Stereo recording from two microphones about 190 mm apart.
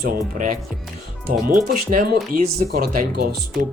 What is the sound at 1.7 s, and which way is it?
Speech, 45° right (ahead or behind).